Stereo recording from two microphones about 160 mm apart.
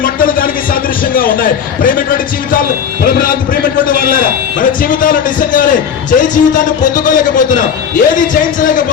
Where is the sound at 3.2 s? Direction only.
60° left (ahead or behind).